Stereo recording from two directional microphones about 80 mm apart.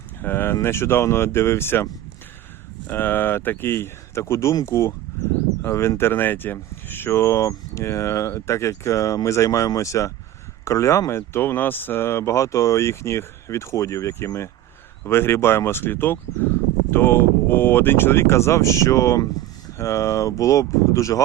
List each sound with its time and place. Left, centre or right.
0.2 s speech: left